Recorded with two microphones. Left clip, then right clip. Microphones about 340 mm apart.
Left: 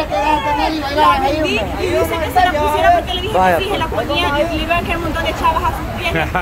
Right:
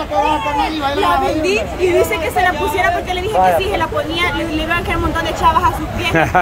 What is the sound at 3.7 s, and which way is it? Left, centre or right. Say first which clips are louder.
Speech: even; centre.